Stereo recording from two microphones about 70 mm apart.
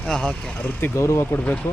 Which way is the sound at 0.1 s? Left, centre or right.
Centre.